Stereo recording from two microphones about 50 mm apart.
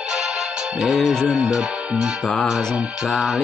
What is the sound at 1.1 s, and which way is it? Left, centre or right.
Music, centre.